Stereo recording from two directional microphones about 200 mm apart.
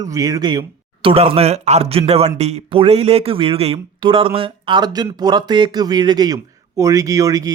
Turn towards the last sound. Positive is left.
turn(degrees=-15)  # may be behind; listen again after turning